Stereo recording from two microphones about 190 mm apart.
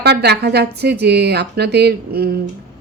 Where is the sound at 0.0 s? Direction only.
60° right (ahead or behind).